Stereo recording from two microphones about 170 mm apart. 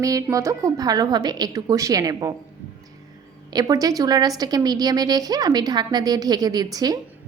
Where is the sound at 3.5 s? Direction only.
20° right (ahead or behind).